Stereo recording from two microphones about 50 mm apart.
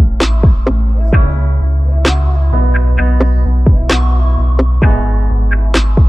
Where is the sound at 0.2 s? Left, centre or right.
Centre.